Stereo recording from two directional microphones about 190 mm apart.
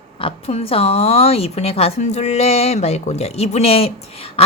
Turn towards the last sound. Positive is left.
turn(degrees=30)  # may be behind; listen again after turning